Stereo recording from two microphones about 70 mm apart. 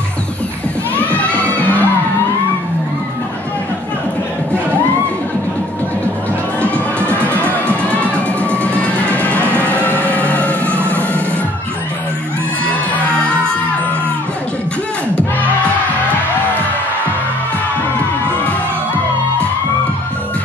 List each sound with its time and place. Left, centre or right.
0.9 s music: left
6.6 s music: left